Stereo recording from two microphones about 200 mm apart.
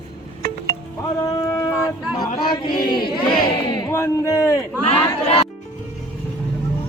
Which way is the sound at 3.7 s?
15° left (ahead or behind).